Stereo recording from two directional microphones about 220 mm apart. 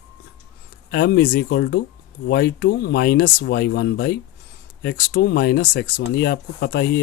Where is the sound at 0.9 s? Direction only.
45° left (ahead or behind).